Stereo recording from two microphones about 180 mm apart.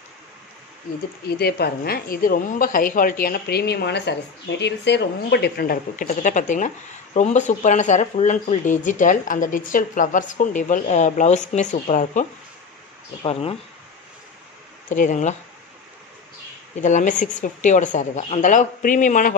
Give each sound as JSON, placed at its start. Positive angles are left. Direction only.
{"t": 1.2, "sound": "a woman's voice", "side_deg": 60}
{"t": 6.0, "sound": "speech", "side_deg": 45}
{"t": 13.2, "sound": "speech", "side_deg": 35}
{"t": 15.0, "sound": "speech", "side_deg": 45}
{"t": 16.7, "sound": "speech", "side_deg": 45}